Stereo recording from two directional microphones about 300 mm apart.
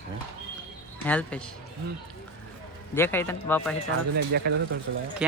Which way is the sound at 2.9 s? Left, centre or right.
Centre.